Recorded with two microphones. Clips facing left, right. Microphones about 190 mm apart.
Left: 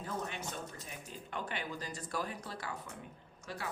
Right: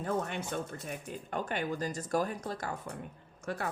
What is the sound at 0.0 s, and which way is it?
Speech, 55° right (ahead or behind).